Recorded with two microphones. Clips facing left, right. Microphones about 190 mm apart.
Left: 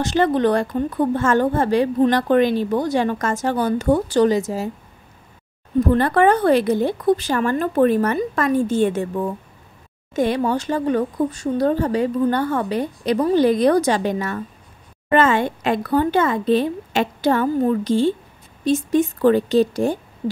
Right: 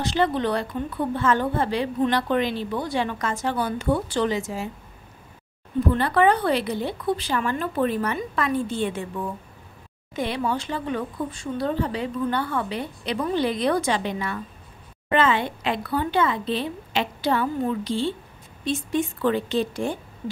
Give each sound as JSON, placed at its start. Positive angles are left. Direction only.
{"t": 0.0, "sound": "speech", "side_deg": 45}
{"t": 5.8, "sound": "a woman's voice", "side_deg": 45}